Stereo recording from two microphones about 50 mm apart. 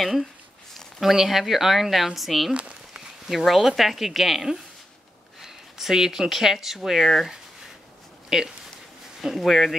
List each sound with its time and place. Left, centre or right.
0.0 s speech: centre
2.5 s a sound: right
3.3 s speech: centre